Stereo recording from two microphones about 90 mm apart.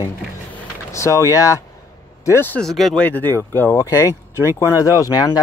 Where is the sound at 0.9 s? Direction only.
35° left (ahead or behind).